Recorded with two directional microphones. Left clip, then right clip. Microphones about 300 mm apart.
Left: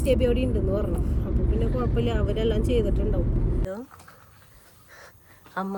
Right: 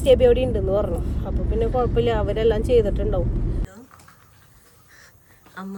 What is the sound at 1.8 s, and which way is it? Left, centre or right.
Speech, right.